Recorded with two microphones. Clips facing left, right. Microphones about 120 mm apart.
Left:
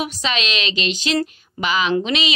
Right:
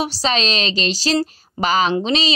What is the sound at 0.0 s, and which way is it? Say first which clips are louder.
Speech: right 4 dB; 35° right (ahead or behind).